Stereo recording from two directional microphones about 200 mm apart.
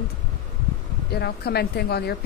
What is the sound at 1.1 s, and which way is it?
Speech, 55° left (ahead or behind).